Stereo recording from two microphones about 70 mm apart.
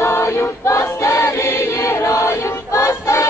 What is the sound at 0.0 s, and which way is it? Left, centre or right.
Choir, left.